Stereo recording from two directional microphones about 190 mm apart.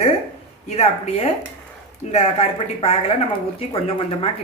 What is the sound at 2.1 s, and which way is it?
Speech, 35° left (ahead or behind).